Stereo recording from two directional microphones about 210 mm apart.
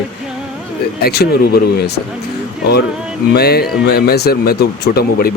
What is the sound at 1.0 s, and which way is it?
Speech, 50° left (ahead or behind).